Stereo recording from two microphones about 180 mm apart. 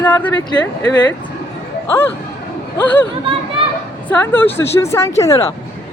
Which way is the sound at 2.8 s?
10° left (ahead or behind).